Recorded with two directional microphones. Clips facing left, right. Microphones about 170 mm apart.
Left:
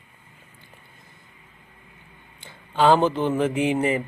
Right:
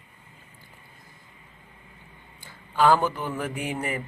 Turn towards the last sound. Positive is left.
turn(degrees=20)  # may be behind; listen again after turning